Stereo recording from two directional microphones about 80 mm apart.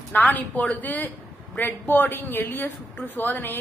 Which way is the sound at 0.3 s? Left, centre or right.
Centre.